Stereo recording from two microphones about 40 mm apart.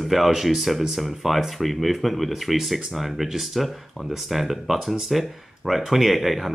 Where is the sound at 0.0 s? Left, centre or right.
Centre.